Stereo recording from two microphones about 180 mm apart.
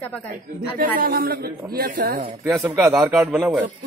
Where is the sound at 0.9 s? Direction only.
55° right (ahead or behind).